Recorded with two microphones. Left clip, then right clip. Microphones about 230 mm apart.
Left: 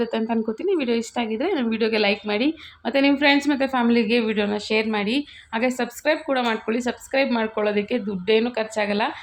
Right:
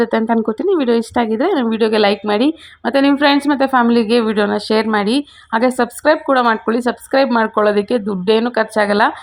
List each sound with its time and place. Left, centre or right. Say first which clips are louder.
0.0 s speech: right 9 dB; right